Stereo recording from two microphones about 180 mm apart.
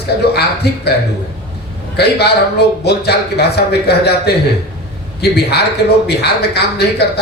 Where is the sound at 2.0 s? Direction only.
65° left (ahead or behind).